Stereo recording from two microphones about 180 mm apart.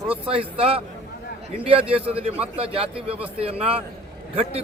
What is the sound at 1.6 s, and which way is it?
A man's voice, 30° right (ahead or behind).